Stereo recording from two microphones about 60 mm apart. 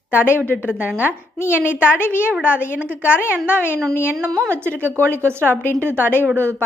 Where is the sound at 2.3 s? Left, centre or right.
Right.